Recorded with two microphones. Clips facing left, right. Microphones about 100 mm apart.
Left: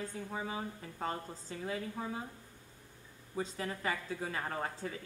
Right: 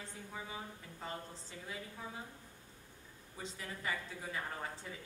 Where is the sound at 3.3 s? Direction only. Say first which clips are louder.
Left 8 dB; 50° left (ahead or behind).